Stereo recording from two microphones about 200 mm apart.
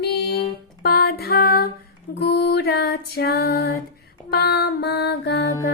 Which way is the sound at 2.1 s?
55° left (ahead or behind).